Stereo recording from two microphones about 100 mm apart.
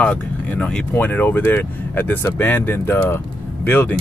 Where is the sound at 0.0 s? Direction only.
15° left (ahead or behind).